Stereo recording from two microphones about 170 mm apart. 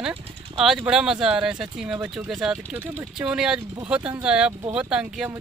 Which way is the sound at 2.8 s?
15° right (ahead or behind).